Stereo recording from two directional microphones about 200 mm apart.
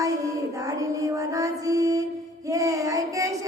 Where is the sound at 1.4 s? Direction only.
15° right (ahead or behind).